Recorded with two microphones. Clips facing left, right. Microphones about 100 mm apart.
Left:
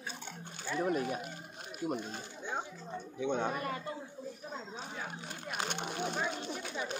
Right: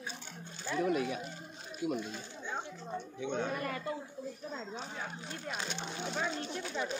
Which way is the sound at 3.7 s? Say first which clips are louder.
Right 1 dB; 25° left (ahead or behind).